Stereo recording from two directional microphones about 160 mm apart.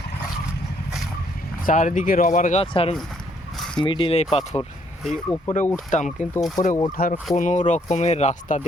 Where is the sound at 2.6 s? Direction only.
35° left (ahead or behind).